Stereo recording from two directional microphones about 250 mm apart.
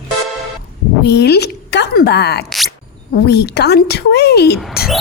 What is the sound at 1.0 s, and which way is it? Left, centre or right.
A woman's voice, left.